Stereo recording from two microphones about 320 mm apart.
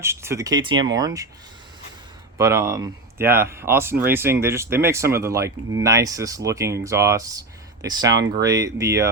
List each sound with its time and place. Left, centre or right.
0.0 s speech: centre
2.4 s speech: centre